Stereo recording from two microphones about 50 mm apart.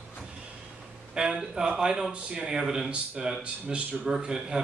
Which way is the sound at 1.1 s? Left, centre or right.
Centre.